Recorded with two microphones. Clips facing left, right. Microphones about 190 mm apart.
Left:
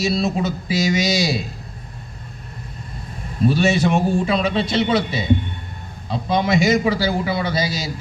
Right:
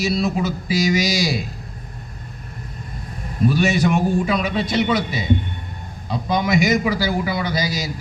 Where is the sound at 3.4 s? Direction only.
25° left (ahead or behind).